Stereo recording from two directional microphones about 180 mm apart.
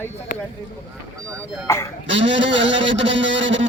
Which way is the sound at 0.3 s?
50° left (ahead or behind).